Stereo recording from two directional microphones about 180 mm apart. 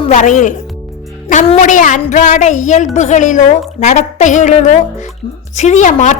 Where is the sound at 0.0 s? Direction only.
40° left (ahead or behind).